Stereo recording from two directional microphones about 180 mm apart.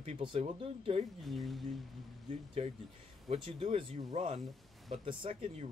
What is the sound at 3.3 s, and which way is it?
A man's voice, 30° right (ahead or behind).